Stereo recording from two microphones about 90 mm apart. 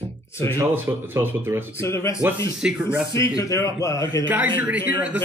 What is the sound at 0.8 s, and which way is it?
Speech, 25° right (ahead or behind).